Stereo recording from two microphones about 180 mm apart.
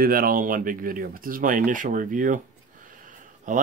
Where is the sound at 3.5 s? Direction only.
45° right (ahead or behind).